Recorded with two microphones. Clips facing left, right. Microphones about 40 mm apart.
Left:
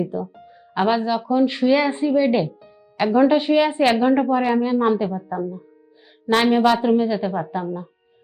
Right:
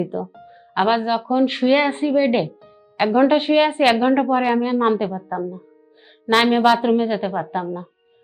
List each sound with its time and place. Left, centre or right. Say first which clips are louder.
0.0 s a woman's voice: even; right